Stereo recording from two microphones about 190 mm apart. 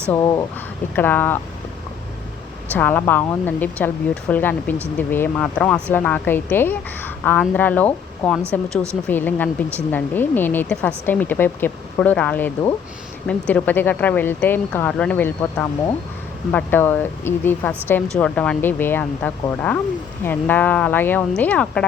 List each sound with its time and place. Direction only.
0.1 s speech: 20° left (ahead or behind)
2.7 s speech: 10° left (ahead or behind)